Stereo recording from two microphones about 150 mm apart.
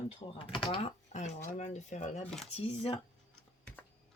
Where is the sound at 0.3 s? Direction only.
35° left (ahead or behind); by 2.2 s 50° left (ahead or behind).